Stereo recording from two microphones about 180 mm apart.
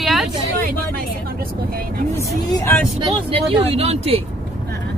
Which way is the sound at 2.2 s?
15° left (ahead or behind).